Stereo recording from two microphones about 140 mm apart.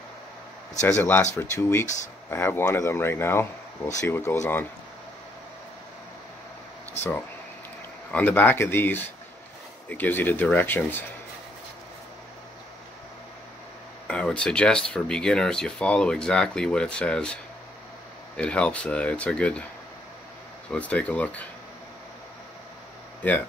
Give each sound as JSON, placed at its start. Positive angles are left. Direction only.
{"t": 0.8, "sound": "speech", "side_deg": 15}
{"t": 8.1, "sound": "speech", "side_deg": 10}
{"t": 14.0, "sound": "speech", "side_deg": 5}
{"t": 20.7, "sound": "speech", "side_deg": 10}
{"t": 23.2, "sound": "speech", "side_deg": 10}